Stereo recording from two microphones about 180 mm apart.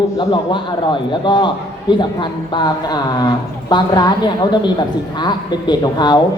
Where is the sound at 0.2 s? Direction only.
25° left (ahead or behind).